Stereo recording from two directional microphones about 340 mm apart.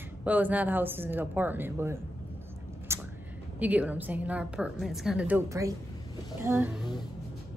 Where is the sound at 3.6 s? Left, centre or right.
Centre.